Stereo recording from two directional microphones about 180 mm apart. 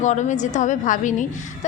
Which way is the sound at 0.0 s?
40° left (ahead or behind).